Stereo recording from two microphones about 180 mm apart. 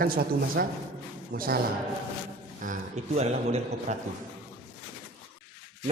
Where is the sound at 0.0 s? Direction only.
55° right (ahead or behind).